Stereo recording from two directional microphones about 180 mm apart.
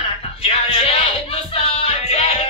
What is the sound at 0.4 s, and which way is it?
Music, 35° left (ahead or behind).